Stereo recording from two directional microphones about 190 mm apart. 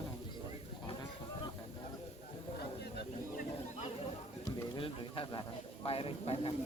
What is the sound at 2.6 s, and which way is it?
Snake, 55° left (ahead or behind).